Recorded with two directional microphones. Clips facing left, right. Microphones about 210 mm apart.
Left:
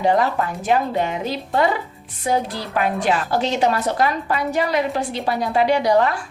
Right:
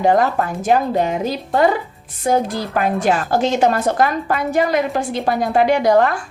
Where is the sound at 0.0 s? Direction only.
50° right (ahead or behind).